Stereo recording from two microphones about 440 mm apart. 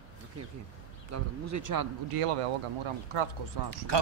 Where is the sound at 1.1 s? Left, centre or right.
Right.